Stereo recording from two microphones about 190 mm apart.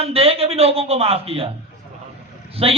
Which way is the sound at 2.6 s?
30° right (ahead or behind).